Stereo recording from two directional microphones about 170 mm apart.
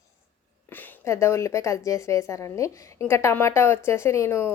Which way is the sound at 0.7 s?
10° left (ahead or behind).